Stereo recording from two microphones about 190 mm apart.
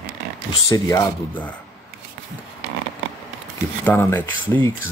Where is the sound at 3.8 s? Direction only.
10° left (ahead or behind).